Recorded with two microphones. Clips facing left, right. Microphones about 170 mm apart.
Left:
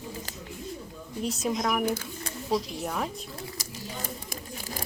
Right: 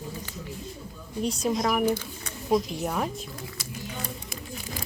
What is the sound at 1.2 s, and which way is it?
A woman's voice, centre (ahead or behind).